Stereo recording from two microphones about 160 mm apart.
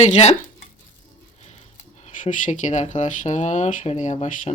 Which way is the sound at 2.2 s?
50° left (ahead or behind).